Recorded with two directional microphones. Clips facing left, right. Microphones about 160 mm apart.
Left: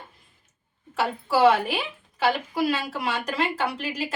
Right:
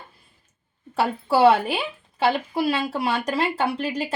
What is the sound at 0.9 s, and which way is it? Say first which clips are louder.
Speech: right 3 dB; 35° right (ahead or behind).